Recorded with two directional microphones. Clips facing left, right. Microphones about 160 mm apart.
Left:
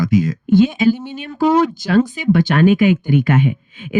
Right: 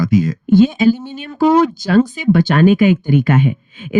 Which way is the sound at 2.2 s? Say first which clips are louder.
Right 2 dB; 35° right (ahead or behind).